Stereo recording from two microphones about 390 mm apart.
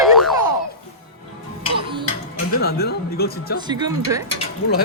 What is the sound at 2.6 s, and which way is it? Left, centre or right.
Speech, left.